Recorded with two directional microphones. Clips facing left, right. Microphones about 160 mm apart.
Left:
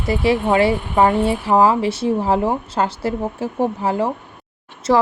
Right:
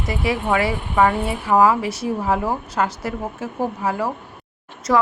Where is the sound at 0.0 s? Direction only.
30° left (ahead or behind).